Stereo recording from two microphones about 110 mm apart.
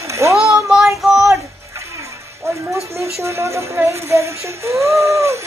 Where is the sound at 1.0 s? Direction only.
Centre (ahead or behind).